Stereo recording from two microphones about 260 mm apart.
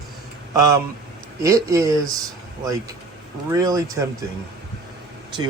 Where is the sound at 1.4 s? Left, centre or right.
Centre.